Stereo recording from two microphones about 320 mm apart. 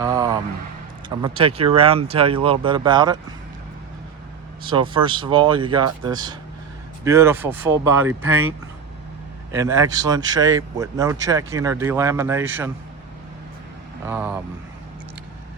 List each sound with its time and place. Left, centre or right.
0.0 s vehicle: centre
1.2 s speech: centre
4.6 s speech: centre
8.3 s speech: right
9.5 s speech: centre
14.1 s speech: centre